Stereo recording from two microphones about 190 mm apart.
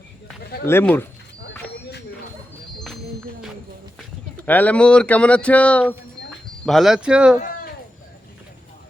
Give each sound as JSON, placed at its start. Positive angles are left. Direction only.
{"t": 0.6, "sound": "speech", "side_deg": 10}
{"t": 2.7, "sound": "music", "side_deg": 0}
{"t": 4.4, "sound": "speech", "side_deg": 10}
{"t": 7.3, "sound": "a sound", "side_deg": 45}